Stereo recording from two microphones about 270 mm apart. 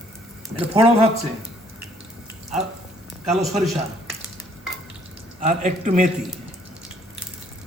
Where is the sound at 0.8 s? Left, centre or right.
Right.